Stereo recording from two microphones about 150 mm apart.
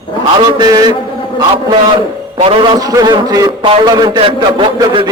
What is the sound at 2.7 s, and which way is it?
A man's voice, 25° right (ahead or behind).